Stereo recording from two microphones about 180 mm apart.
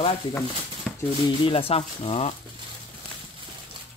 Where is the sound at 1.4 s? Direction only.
30° left (ahead or behind).